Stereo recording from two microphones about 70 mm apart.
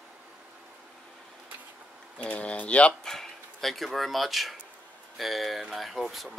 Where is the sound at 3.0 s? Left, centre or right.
Centre.